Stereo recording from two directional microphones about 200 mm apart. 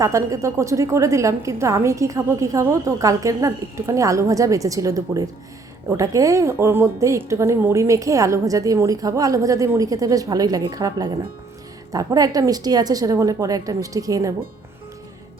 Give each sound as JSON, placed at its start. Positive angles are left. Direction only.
{"t": 0.0, "sound": "a woman's voice", "side_deg": -15}